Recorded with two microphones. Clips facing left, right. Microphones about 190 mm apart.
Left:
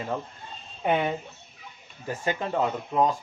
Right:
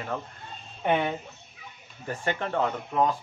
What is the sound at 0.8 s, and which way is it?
Speech, 5° left (ahead or behind).